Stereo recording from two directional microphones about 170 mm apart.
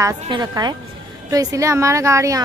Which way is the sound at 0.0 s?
25° right (ahead or behind).